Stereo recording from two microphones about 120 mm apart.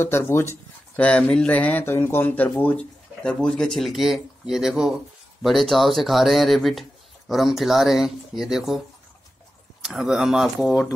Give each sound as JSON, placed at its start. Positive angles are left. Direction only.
{"t": 0.0, "sound": "speech", "side_deg": 20}
{"t": 9.9, "sound": "speech", "side_deg": -5}